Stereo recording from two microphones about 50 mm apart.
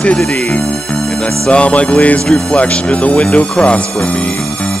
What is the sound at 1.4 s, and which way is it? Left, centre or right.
Speech, left.